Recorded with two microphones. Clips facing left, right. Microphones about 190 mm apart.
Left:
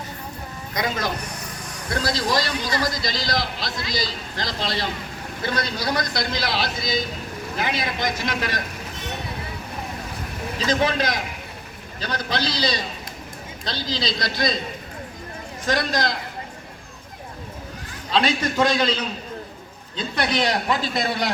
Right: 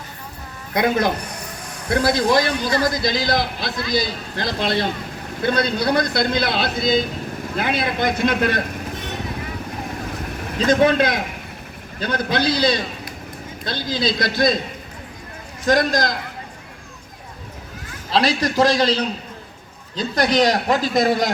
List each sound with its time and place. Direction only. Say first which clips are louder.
0.7 s a man's voice: right 7 dB; 55° right (ahead or behind)
10.6 s a man's voice: right 7 dB; 55° right (ahead or behind)
15.6 s a man's voice: right 5 dB; 45° right (ahead or behind)
18.1 s a man's voice: right 3 dB; 35° right (ahead or behind)